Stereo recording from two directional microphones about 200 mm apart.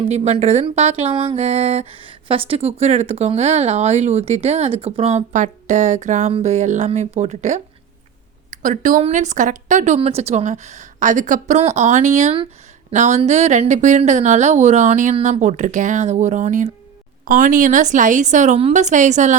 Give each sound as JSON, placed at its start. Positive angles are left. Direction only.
{"t": 0.1, "sound": "speech", "side_deg": -35}